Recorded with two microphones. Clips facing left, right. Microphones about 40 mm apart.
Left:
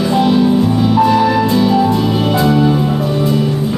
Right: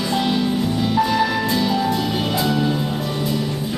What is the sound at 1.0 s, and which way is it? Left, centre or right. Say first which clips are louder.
Music: left 7 dB; left.